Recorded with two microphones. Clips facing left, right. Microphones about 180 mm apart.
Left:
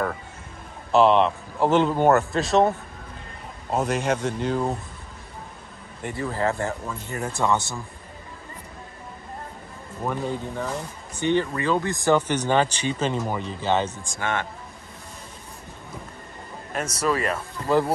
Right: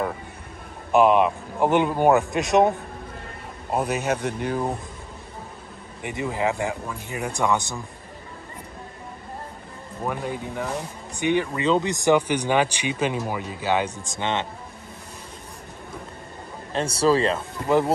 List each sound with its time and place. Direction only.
0.9 s speech: 10° right (ahead or behind)
3.7 s speech: 10° right (ahead or behind)
6.0 s speech: 15° right (ahead or behind)
10.0 s speech: 10° right (ahead or behind)
16.7 s speech: 30° right (ahead or behind)